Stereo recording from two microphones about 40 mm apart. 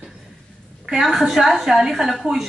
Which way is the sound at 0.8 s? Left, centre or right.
Centre.